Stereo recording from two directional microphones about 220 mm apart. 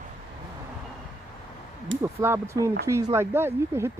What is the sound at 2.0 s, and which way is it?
Speech, 10° right (ahead or behind).